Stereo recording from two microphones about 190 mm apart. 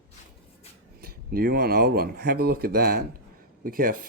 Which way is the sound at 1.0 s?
50° right (ahead or behind).